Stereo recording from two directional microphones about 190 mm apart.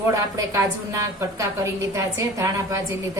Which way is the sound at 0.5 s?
15° right (ahead or behind).